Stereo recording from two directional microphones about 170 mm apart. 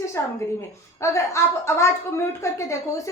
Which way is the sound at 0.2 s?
15° left (ahead or behind).